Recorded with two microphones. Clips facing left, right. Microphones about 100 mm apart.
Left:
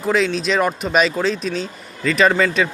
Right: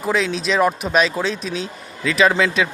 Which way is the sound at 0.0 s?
5° right (ahead or behind).